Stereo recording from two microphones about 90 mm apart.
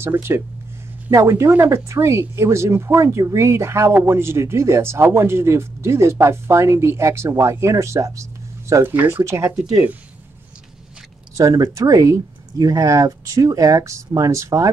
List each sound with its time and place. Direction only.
0.0 s speech: 25° right (ahead or behind)
8.9 s speech: 20° right (ahead or behind)
9.2 s speech: 30° right (ahead or behind)
11.3 s speech: 35° right (ahead or behind)